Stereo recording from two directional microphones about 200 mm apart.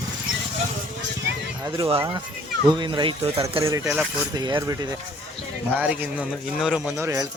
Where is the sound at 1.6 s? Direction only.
20° right (ahead or behind).